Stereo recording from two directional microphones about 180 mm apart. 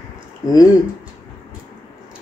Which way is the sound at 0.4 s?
20° left (ahead or behind).